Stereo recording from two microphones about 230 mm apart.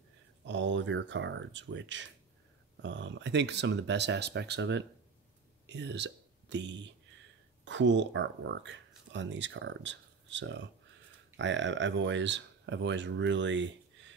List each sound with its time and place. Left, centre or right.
0.5 s speech: right